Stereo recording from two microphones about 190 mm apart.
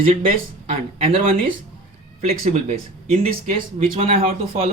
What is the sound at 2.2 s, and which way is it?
Speech, 30° right (ahead or behind).